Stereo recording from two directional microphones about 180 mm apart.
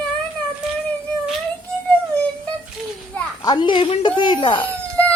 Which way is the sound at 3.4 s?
25° left (ahead or behind).